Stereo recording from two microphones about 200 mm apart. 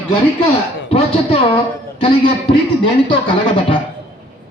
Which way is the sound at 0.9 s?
30° left (ahead or behind).